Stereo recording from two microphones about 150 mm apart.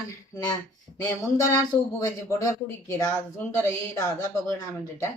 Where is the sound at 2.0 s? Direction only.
20° left (ahead or behind).